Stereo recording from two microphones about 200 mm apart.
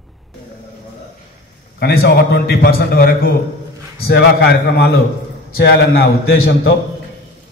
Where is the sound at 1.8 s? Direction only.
55° left (ahead or behind).